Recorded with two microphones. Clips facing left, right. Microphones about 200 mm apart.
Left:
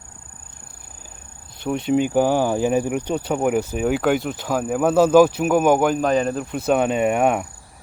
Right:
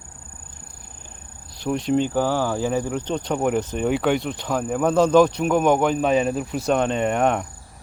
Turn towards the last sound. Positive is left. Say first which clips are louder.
# left 2 dB
turn(degrees=10)  # may be behind; listen again after turning